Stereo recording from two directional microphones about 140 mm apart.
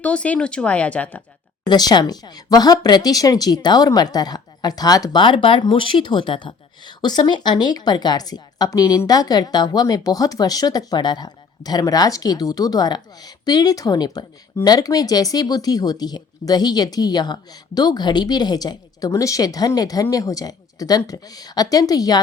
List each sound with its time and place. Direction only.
0.0 s speech: 10° left (ahead or behind)
1.6 s speech: 30° left (ahead or behind)